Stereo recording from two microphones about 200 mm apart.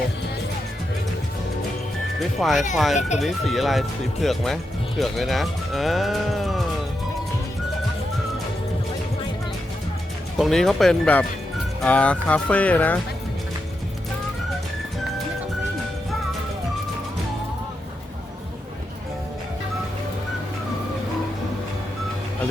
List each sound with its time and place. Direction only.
2.1 s speech: centre (ahead or behind)
10.3 s speech: centre (ahead or behind)